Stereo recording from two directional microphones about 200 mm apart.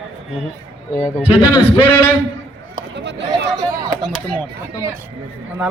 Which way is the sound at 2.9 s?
60° right (ahead or behind).